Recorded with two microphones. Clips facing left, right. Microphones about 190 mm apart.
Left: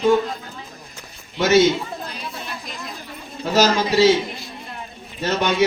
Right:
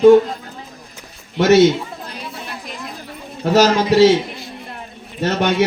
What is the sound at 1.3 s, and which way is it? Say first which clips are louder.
Speech: right 4 dB; 65° right (ahead or behind).